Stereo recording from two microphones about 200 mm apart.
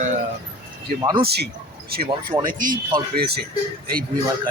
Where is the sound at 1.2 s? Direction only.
55° right (ahead or behind).